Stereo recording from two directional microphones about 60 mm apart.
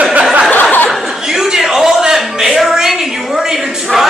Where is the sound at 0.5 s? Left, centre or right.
Left.